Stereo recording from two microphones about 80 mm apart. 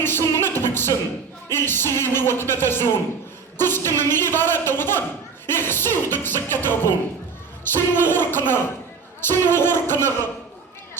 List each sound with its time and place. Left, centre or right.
0.0 s music: left
3.6 s speech: left
7.9 s speech: left